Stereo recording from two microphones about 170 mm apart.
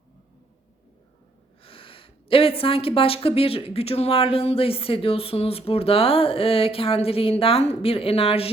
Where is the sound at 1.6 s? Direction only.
30° left (ahead or behind).